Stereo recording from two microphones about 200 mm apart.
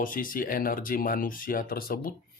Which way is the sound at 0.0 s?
45° left (ahead or behind).